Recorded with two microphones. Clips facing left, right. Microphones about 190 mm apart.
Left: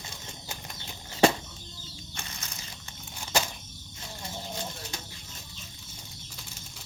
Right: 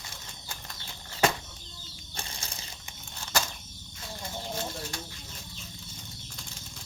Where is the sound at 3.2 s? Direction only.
15° left (ahead or behind).